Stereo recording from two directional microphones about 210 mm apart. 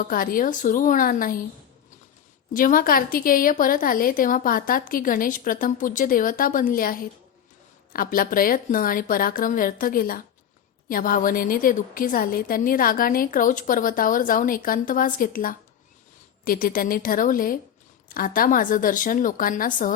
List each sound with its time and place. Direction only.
0.0 s a woman's voice: 40° left (ahead or behind)
2.5 s a woman's voice: 40° left (ahead or behind)
7.9 s a woman's voice: 45° left (ahead or behind)